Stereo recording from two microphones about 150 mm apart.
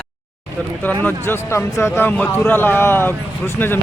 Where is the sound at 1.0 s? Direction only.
15° left (ahead or behind).